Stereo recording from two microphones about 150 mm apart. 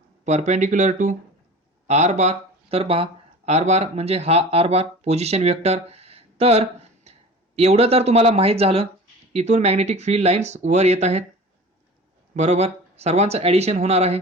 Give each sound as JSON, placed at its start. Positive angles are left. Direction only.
{"t": 0.3, "sound": "speech", "side_deg": -50}
{"t": 12.3, "sound": "speech", "side_deg": -50}